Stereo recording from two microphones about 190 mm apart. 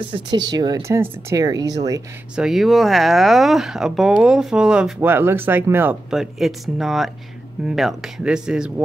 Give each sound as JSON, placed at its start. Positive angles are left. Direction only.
{"t": 0.1, "sound": "speech", "side_deg": -25}
{"t": 2.3, "sound": "speech", "side_deg": 0}